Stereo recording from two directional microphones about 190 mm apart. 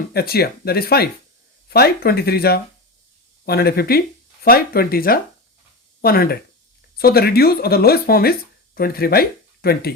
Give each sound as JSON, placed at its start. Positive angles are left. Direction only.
{"t": 0.1, "sound": "speech", "side_deg": 55}